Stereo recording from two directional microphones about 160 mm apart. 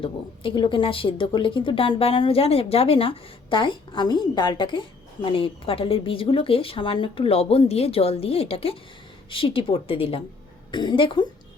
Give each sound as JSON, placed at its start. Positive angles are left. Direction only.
{"t": 0.0, "sound": "a woman's voice", "side_deg": 30}